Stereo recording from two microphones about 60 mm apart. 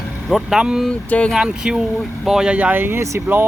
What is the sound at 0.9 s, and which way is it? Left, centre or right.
Speech, centre.